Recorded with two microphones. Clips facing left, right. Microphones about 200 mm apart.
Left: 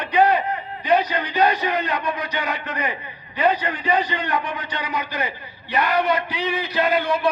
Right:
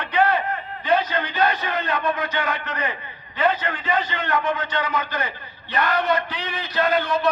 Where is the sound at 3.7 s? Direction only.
40° left (ahead or behind).